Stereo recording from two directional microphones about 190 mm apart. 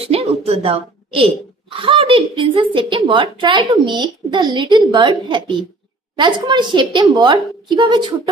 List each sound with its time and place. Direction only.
0.0 s speech: 30° right (ahead or behind)